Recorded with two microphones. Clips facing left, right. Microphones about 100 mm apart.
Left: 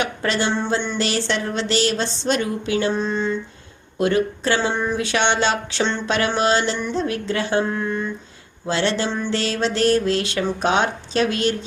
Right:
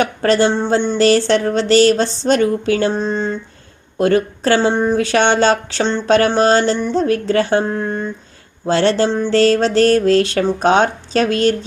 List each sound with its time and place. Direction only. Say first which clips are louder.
0.0 s speech: right 8 dB; 40° right (ahead or behind)
8.6 s music: right 7 dB; 45° right (ahead or behind)